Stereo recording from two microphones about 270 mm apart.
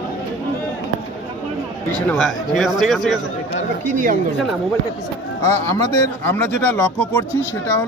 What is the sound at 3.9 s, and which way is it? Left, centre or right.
Speech, right.